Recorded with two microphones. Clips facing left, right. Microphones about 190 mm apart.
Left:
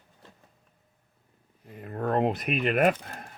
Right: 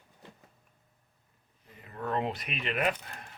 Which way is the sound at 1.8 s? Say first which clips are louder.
Left 7 dB; 50° left (ahead or behind).